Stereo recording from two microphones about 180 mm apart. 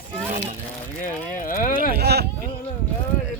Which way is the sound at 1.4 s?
50° left (ahead or behind).